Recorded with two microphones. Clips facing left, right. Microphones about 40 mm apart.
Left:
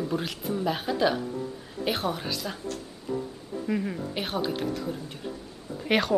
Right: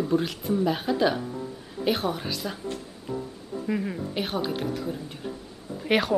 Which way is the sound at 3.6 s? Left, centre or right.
Centre.